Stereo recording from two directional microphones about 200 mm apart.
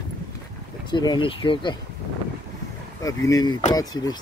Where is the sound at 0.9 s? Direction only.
20° left (ahead or behind).